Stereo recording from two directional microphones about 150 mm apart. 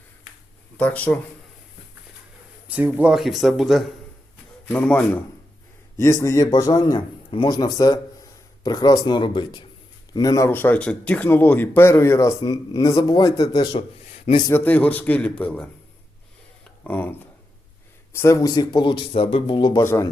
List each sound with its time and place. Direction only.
0.8 s speech: 10° left (ahead or behind)
2.6 s speech: 10° right (ahead or behind); by 5.2 s 10° left (ahead or behind)
6.0 s a man's voice: 20° left (ahead or behind)
14.4 s speech: 15° left (ahead or behind)
16.8 s speech: 10° left (ahead or behind); by 19.8 s 30° left (ahead or behind)
19.8 s a man's voice: 20° left (ahead or behind)